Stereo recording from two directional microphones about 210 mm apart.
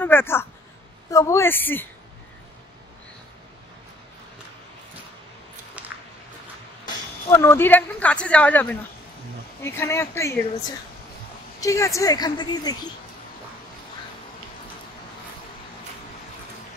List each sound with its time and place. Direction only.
0.0 s speech: 10° left (ahead or behind)
5.8 s a sound: 5° right (ahead or behind)
7.2 s speech: 10° left (ahead or behind)
11.6 s speech: 15° left (ahead or behind)